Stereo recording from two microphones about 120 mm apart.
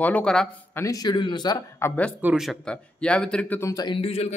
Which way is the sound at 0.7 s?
30° left (ahead or behind).